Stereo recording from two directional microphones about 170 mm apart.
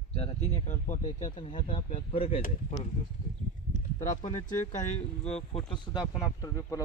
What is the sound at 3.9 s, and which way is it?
Speech, 45° left (ahead or behind).